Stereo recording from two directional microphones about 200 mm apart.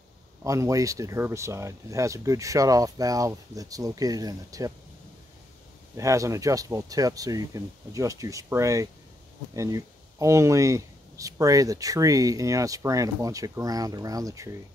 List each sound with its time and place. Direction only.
0.4 s speech: 15° right (ahead or behind)
5.9 s speech: 15° right (ahead or behind)